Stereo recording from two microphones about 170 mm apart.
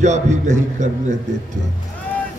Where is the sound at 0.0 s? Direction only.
45° right (ahead or behind).